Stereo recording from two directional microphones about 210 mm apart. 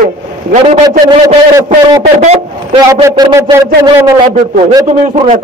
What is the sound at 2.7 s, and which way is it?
A man's voice, 20° right (ahead or behind).